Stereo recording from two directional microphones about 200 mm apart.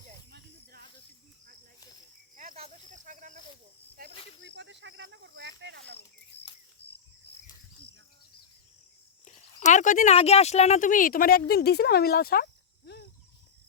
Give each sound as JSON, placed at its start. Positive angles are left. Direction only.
{"t": 0.3, "sound": "snake", "side_deg": -50}
{"t": 2.3, "sound": "cricket", "side_deg": -45}
{"t": 2.6, "sound": "snake", "side_deg": -35}
{"t": 4.4, "sound": "a sound", "side_deg": -60}
{"t": 6.8, "sound": "cricket", "side_deg": 55}
{"t": 9.2, "sound": "speech", "side_deg": 35}